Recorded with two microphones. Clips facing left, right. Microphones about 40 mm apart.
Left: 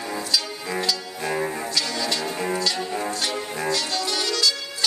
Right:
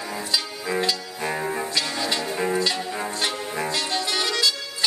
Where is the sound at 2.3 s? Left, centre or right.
Centre.